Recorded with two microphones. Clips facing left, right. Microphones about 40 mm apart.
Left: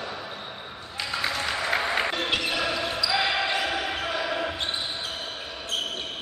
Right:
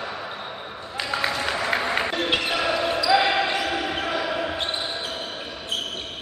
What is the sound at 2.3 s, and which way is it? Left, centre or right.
Basketball bounce, centre.